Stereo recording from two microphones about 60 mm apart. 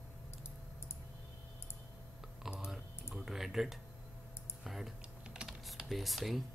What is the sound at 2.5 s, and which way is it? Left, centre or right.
Speech, centre.